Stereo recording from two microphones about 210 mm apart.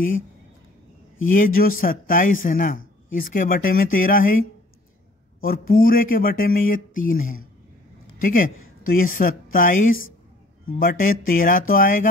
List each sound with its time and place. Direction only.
1.2 s speech: 40° left (ahead or behind)
5.4 s speech: 45° left (ahead or behind)